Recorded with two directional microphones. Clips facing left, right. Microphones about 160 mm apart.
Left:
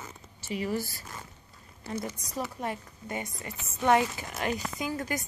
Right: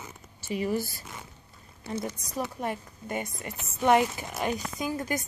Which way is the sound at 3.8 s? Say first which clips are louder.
Right 2 dB; 15° right (ahead or behind).